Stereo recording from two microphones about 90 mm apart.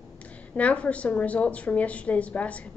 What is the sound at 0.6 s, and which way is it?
A woman's voice, 15° left (ahead or behind).